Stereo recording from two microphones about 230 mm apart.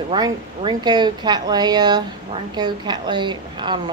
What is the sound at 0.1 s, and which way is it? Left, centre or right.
A woman's voice, centre.